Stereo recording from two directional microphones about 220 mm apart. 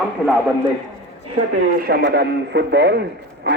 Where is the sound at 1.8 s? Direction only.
45° right (ahead or behind).